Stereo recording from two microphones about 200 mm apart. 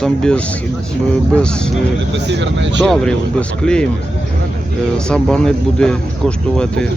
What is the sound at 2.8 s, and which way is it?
Speech, 5° left (ahead or behind).